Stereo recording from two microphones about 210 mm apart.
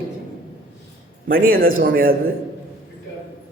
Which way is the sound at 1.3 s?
45° right (ahead or behind).